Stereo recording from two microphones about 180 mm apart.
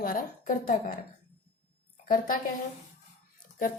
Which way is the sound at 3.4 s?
50° left (ahead or behind).